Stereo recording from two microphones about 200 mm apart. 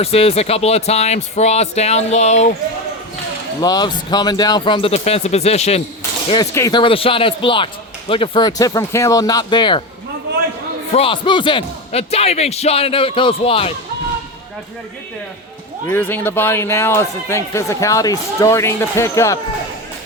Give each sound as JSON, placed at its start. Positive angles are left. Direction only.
{"t": 0.0, "sound": "speech", "side_deg": 30}
{"t": 3.6, "sound": "speech", "side_deg": 20}
{"t": 6.0, "sound": "speech", "side_deg": 15}
{"t": 10.9, "sound": "speech", "side_deg": 25}
{"t": 15.9, "sound": "speech", "side_deg": 10}